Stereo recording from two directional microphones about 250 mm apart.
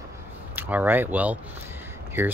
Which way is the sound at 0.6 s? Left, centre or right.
Centre.